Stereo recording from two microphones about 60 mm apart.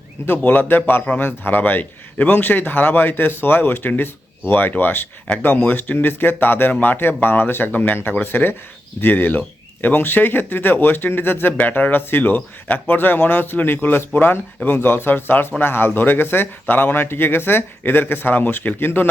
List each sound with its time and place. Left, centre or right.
0.3 s speech: left
5.3 s speech: centre
5.6 s speech: left